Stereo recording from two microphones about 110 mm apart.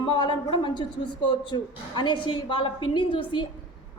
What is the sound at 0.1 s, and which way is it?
A woman's voice, 45° left (ahead or behind).